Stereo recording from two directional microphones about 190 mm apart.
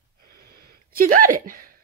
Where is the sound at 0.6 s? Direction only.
50° right (ahead or behind).